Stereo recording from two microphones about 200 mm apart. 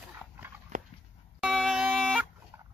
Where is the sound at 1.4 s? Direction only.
Centre (ahead or behind).